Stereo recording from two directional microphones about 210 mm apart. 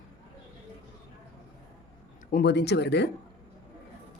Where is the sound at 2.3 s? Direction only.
55° left (ahead or behind).